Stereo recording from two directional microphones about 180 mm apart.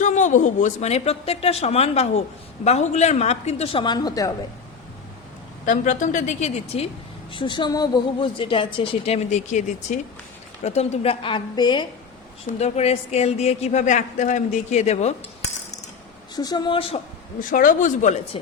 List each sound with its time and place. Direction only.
0.0 s a woman's voice: 45° left (ahead or behind); by 4.3 s 20° left (ahead or behind)
5.6 s a woman's voice: 45° left (ahead or behind)
7.3 s a woman's voice: 25° left (ahead or behind)
12.5 s a woman's voice: 40° left (ahead or behind)
16.3 s a woman's voice: 20° left (ahead or behind)
17.5 s a woman's voice: 50° left (ahead or behind)